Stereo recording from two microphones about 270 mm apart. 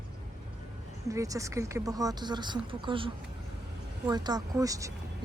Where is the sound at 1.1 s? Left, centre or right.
Centre.